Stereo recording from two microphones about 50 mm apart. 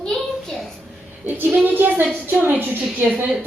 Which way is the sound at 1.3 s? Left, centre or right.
Right.